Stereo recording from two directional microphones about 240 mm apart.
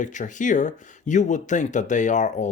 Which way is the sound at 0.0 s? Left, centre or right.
Left.